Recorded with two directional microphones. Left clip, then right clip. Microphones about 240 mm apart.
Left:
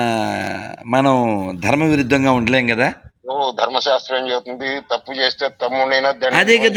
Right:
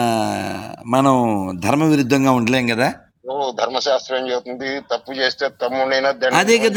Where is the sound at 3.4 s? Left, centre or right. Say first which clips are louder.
Left 2 dB; centre.